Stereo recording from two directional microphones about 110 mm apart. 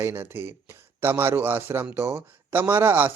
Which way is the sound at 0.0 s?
20° right (ahead or behind).